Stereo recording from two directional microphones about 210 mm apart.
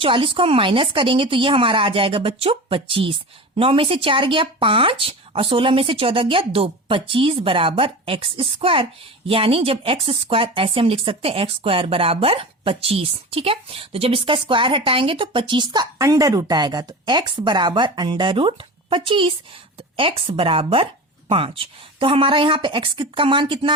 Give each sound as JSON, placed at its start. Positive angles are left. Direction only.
{"t": 0.0, "sound": "speech", "side_deg": -25}